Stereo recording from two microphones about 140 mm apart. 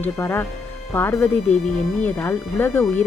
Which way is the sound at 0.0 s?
20° left (ahead or behind).